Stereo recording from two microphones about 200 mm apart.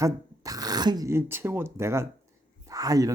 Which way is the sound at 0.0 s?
15° right (ahead or behind).